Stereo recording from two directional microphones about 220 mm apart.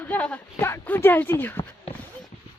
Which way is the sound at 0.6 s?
10° left (ahead or behind).